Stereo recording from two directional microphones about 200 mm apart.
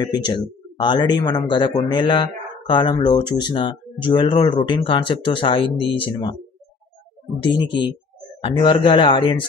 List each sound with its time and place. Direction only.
0.0 s a man's voice: 20° left (ahead or behind)
7.4 s a man's voice: 25° left (ahead or behind)